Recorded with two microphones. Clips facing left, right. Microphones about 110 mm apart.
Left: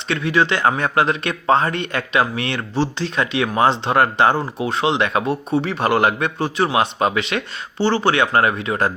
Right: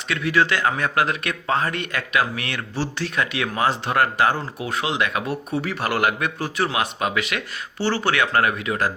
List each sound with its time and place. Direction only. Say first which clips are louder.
0.1 s speech: left 2 dB; 25° left (ahead or behind)